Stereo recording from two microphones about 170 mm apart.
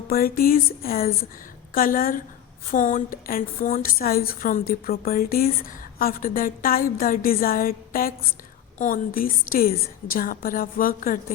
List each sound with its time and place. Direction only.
0.1 s a woman's voice: 60° left (ahead or behind)